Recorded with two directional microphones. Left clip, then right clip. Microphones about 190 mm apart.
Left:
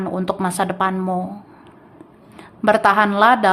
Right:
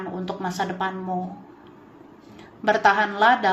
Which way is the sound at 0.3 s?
35° left (ahead or behind).